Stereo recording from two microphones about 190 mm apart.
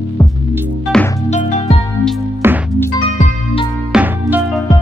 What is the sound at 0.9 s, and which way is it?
Music, 5° left (ahead or behind).